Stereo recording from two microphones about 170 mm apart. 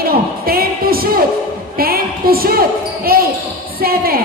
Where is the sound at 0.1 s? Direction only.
60° right (ahead or behind).